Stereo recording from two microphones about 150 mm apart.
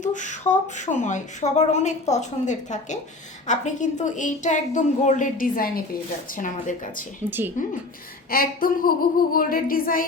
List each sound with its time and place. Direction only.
0.0 s a woman's voice: 55° left (ahead or behind)
7.3 s speech: 15° right (ahead or behind)
8.3 s a sound: 75° left (ahead or behind)